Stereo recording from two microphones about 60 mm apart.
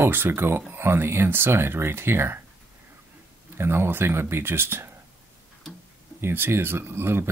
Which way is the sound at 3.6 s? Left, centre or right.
Right.